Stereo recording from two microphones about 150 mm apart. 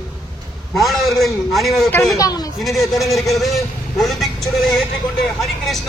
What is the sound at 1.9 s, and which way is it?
Speech, 15° left (ahead or behind).